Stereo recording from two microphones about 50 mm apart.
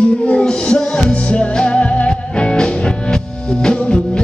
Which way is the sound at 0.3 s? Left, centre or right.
Centre.